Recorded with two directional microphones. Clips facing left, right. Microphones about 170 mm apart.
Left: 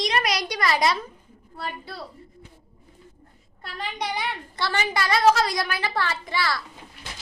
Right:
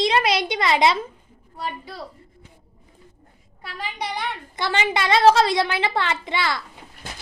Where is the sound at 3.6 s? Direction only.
5° right (ahead or behind).